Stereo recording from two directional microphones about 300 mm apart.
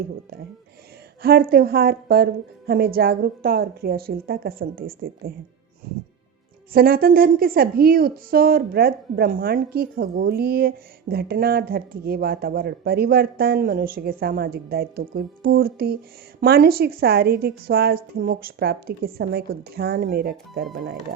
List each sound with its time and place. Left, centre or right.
1.2 s speech: right
6.7 s a woman's voice: right